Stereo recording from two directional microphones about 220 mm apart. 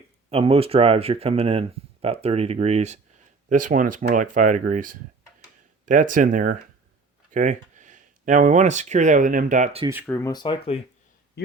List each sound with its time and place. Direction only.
0.3 s speech: 25° right (ahead or behind)
9.8 s speech: 10° right (ahead or behind)
10.1 s speech: 10° left (ahead or behind)
11.4 s a man's voice: 50° left (ahead or behind)